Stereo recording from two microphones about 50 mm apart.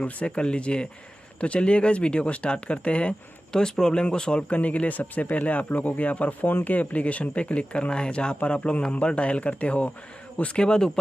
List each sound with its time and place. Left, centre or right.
0.0 s speech: left
4.6 s speech: left